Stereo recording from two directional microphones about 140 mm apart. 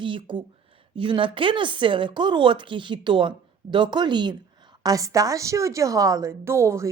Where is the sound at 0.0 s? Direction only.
35° right (ahead or behind).